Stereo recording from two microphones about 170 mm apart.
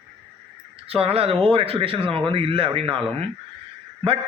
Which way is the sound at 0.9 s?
35° right (ahead or behind).